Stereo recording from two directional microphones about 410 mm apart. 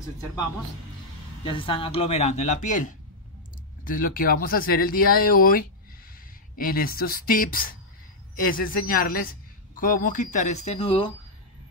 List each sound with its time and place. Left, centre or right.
1.4 s a man's voice: centre